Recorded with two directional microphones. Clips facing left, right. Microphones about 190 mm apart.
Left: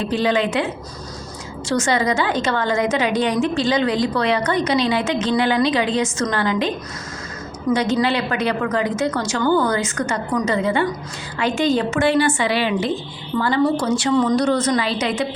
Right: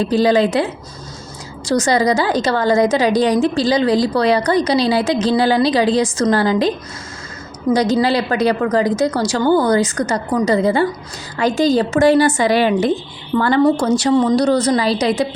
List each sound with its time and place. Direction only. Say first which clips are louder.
0.0 s a woman's voice: right 5 dB; 35° right (ahead or behind)